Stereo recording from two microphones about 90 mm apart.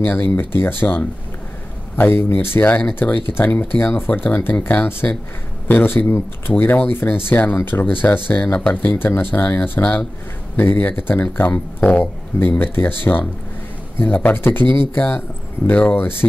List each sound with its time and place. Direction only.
0.0 s speech: 20° left (ahead or behind)